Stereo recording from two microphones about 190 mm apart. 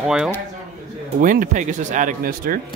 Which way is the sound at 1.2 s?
45° right (ahead or behind).